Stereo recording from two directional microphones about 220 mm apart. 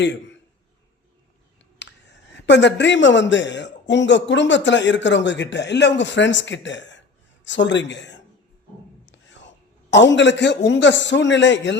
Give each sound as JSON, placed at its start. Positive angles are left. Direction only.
{"t": 0.0, "sound": "a man's voice", "side_deg": 55}
{"t": 1.8, "sound": "a man's voice", "side_deg": 50}
{"t": 9.0, "sound": "whispering", "side_deg": 55}
{"t": 9.9, "sound": "a man's voice", "side_deg": 55}